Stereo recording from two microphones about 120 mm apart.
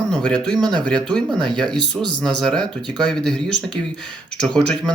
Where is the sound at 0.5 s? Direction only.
35° right (ahead or behind).